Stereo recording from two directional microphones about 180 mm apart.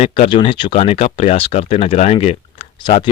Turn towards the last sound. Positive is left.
turn(degrees=35)  # may be behind; listen again after turning